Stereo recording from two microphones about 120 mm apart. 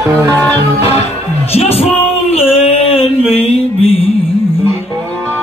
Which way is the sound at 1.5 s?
55° left (ahead or behind).